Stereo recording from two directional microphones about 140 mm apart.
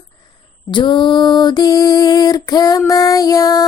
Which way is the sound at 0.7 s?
35° left (ahead or behind).